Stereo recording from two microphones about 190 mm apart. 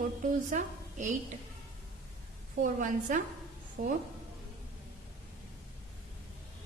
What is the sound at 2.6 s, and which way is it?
A woman's voice, 45° right (ahead or behind).